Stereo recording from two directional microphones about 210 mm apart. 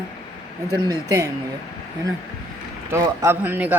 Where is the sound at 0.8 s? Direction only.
15° right (ahead or behind).